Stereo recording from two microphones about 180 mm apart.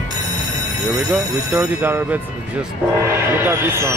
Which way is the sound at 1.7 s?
10° right (ahead or behind).